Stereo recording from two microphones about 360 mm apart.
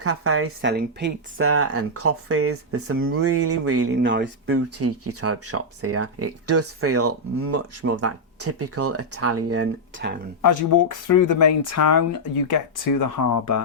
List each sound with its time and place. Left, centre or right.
0.0 s speech: right
10.4 s speech: left
12.5 s speech: left